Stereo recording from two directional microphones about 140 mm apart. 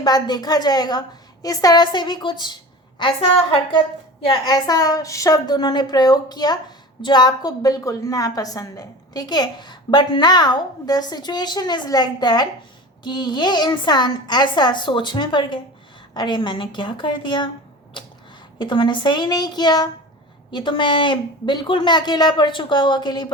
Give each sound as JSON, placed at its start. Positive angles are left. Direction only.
{"t": 0.0, "sound": "a woman's voice", "side_deg": 30}
{"t": 18.6, "sound": "a woman's voice", "side_deg": 35}